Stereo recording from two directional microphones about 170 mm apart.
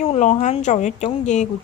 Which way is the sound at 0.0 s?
40° left (ahead or behind).